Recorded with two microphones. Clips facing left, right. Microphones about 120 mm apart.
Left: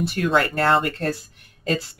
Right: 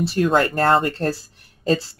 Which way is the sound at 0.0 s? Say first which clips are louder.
Right 3 dB; 30° right (ahead or behind).